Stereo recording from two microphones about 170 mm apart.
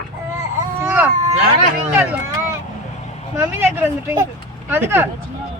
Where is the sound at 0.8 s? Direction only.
10° right (ahead or behind).